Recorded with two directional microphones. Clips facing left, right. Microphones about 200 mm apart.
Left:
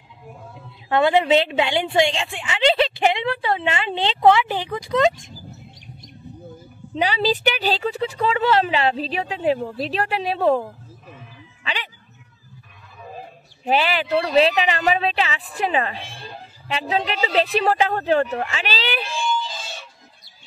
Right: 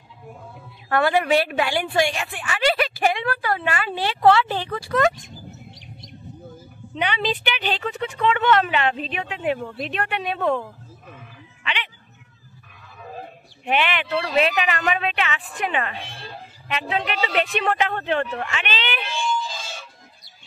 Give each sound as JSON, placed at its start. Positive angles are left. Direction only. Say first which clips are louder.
{"t": 0.8, "sound": "a woman's voice", "louder": "left 3 dB", "side_deg": 20}
{"t": 7.0, "sound": "speech", "louder": "left 4 dB", "side_deg": 35}
{"t": 11.6, "sound": "music", "louder": "even", "side_deg": 40}
{"t": 13.7, "sound": "speech", "louder": "left 3 dB", "side_deg": 35}